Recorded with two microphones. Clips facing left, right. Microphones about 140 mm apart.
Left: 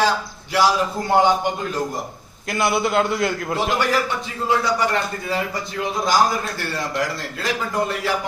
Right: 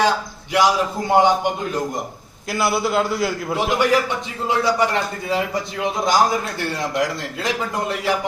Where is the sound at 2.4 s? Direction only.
Centre (ahead or behind).